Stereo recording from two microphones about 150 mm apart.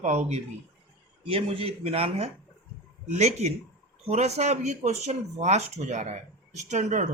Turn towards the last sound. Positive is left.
turn(degrees=-55)  # may be behind; listen again after turning